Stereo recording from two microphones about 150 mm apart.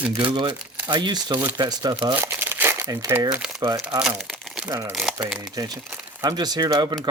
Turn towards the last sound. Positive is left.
turn(degrees=-30)  # may be behind; listen again after turning